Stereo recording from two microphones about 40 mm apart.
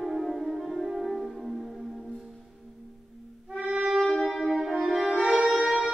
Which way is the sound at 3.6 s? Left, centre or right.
Right.